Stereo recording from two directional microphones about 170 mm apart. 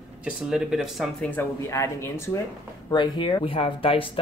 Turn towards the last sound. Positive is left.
turn(degrees=30)  # may be behind; listen again after turning